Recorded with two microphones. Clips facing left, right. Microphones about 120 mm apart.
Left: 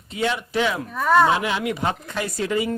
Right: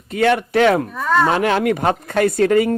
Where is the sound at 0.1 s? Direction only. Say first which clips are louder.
Right 8 dB; 55° right (ahead or behind).